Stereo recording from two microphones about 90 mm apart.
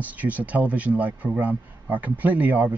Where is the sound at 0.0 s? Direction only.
20° right (ahead or behind).